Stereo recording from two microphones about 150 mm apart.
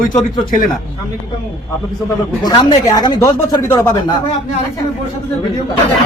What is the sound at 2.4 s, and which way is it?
Speech, 30° left (ahead or behind).